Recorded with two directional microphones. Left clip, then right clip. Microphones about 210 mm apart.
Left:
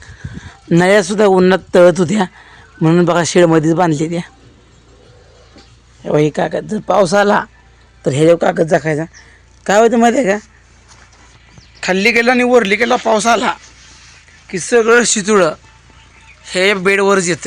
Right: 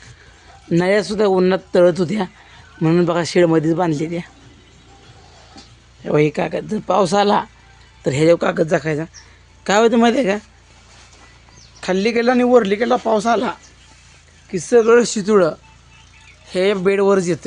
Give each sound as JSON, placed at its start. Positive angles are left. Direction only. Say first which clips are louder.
{"t": 0.4, "sound": "speech", "louder": "left 6 dB", "side_deg": 40}
{"t": 6.0, "sound": "a man's voice", "louder": "left 3 dB", "side_deg": 20}
{"t": 11.8, "sound": "a man's voice", "louder": "left 6 dB", "side_deg": 15}
{"t": 14.4, "sound": "speech", "louder": "left 2 dB", "side_deg": 0}